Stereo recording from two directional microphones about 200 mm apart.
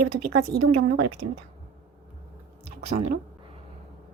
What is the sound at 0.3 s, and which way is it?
Speech, 55° right (ahead or behind).